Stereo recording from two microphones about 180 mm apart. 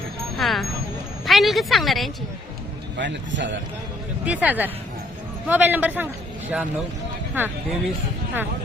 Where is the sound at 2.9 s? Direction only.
85° right.